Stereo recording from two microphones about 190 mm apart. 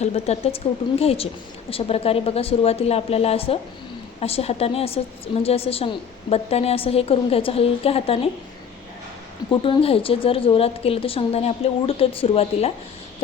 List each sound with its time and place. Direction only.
0.0 s a woman's voice: 35° left (ahead or behind)
9.5 s a woman's voice: 30° left (ahead or behind)